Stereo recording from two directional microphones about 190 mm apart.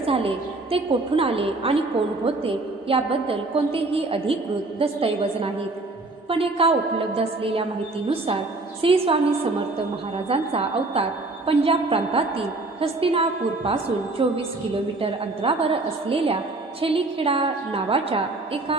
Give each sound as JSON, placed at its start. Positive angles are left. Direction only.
{"t": 0.0, "sound": "a woman's voice", "side_deg": -30}
{"t": 8.8, "sound": "a woman's voice", "side_deg": -30}